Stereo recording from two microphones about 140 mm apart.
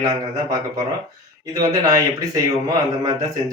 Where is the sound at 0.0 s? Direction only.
30° right (ahead or behind).